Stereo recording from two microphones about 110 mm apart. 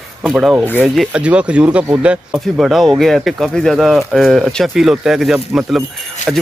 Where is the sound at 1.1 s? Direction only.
10° right (ahead or behind).